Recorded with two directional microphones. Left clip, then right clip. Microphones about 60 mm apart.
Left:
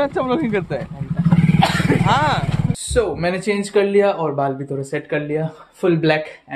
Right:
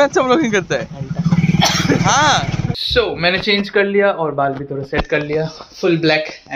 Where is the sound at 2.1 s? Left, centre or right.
Centre.